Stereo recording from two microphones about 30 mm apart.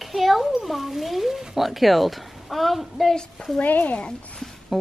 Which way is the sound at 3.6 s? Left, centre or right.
Left.